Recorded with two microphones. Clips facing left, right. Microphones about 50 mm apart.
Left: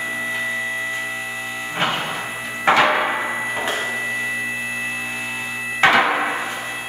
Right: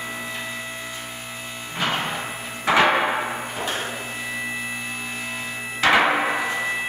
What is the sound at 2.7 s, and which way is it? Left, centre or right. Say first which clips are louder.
Music: right 1 dB; centre.